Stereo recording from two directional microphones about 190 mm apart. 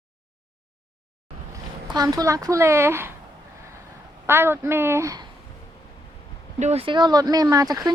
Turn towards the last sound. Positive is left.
turn(degrees=-20)  # may be behind; listen again after turning